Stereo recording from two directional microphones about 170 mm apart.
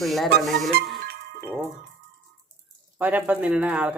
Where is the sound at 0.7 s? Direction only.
65° right (ahead or behind).